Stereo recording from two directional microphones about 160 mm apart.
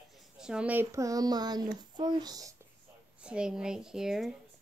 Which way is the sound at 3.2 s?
5° right (ahead or behind).